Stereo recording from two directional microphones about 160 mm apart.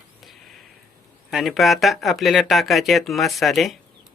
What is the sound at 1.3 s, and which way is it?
Speech, centre (ahead or behind).